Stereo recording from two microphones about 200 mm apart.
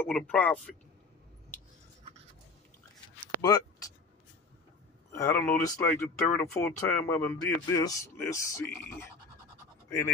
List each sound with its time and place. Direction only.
0.0 s a man's voice: 5° left (ahead or behind)
3.3 s a sound: 20° left (ahead or behind)
5.1 s a man's voice: 10° left (ahead or behind)
9.8 s speech: 10° left (ahead or behind)